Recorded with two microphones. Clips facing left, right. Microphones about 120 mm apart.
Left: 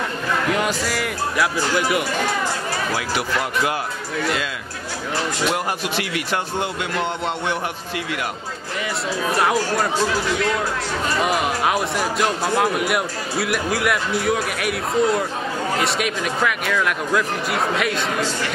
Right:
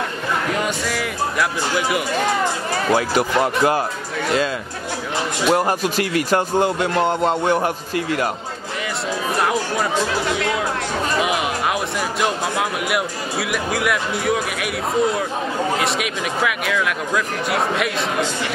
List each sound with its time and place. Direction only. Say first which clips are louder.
0.6 s speech: even; centre (ahead or behind)
2.9 s a man's voice: right 9 dB; 40° right (ahead or behind)
5.5 s a man's voice: right 5 dB; 40° right (ahead or behind)
9.4 s speech: left 1 dB; centre (ahead or behind)
11.1 s speech: left 2 dB; centre (ahead or behind)